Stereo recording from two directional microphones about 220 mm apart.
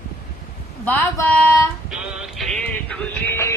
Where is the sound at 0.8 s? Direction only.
10° left (ahead or behind).